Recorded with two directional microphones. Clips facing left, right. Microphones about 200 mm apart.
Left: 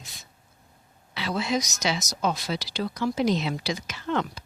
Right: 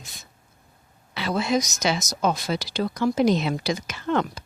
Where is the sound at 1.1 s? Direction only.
50° right (ahead or behind).